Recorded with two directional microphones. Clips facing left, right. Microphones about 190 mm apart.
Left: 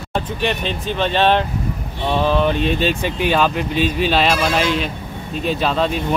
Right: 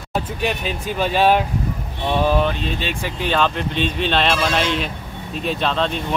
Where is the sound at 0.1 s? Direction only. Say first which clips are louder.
Left 1 dB; 5° right (ahead or behind).